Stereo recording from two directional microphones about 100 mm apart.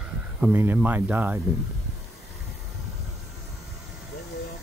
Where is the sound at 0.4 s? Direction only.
20° right (ahead or behind).